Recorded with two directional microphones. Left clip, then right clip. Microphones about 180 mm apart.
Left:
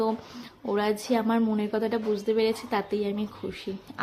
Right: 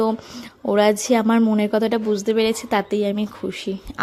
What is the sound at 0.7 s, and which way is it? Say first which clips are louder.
A woman's voice: right 9 dB; 40° right (ahead or behind).